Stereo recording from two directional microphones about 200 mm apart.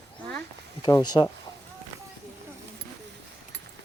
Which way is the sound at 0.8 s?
20° left (ahead or behind).